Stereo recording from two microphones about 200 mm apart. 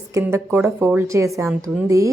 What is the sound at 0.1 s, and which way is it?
A woman's voice, 15° right (ahead or behind).